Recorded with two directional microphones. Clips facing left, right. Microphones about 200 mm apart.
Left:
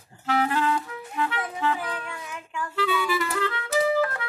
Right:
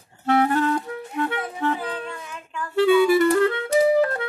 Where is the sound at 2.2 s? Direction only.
15° left (ahead or behind).